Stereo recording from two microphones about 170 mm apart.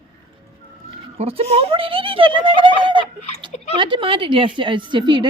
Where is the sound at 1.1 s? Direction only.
35° right (ahead or behind).